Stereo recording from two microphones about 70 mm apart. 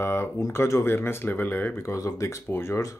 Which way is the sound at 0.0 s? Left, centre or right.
Left.